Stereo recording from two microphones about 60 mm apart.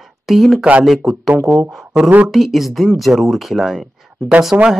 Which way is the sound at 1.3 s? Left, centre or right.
Right.